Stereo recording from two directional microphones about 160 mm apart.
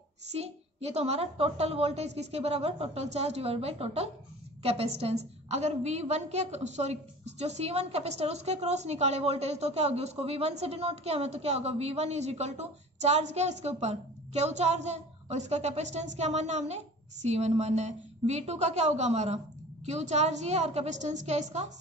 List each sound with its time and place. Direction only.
0.3 s a woman's voice: 40° right (ahead or behind)